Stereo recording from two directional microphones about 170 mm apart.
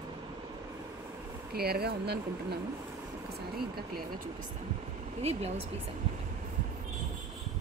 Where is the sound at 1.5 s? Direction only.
65° right (ahead or behind).